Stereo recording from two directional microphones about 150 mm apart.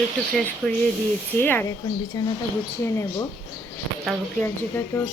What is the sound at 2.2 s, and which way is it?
Speech, 25° left (ahead or behind).